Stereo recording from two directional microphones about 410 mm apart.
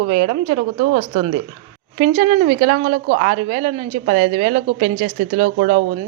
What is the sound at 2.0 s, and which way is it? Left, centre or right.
A woman's voice, centre.